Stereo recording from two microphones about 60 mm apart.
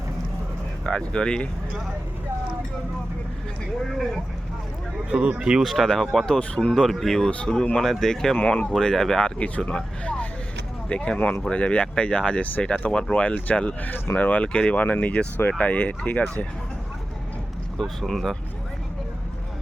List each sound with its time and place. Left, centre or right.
0.9 s speech: centre
3.8 s speech: centre
5.0 s speech: centre
5.6 s speech: centre
6.3 s speech: centre
8.4 s speech: left
8.7 s speech: centre
9.2 s speech: left
13.9 s speech: left
17.7 s speech: centre